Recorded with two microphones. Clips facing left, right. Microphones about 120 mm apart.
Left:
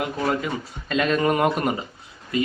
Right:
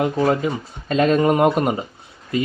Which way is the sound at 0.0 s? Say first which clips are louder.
Right 6 dB; 35° right (ahead or behind).